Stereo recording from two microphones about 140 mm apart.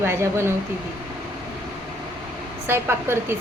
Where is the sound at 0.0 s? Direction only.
20° right (ahead or behind).